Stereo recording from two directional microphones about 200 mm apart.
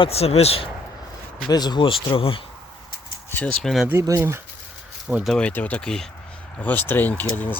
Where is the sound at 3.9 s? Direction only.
15° right (ahead or behind).